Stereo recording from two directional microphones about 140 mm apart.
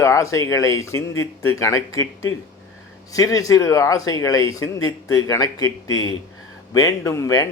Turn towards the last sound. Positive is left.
turn(degrees=25)  # may be behind; listen again after turning